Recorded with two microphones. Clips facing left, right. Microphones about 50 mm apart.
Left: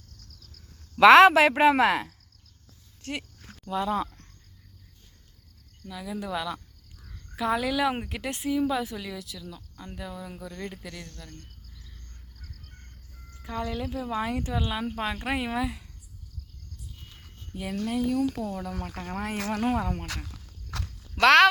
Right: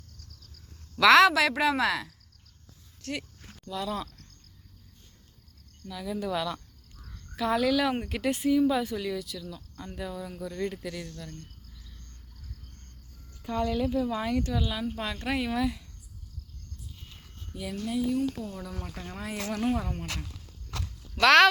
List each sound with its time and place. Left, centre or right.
0.9 s speech: left
3.0 s a sound: centre
3.7 s speech: left
5.8 s a woman's voice: centre
13.5 s speech: centre
17.6 s speech: left
18.5 s speech: left
20.8 s a sound: left